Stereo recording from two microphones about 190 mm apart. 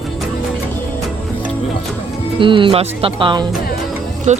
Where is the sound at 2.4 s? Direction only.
25° right (ahead or behind).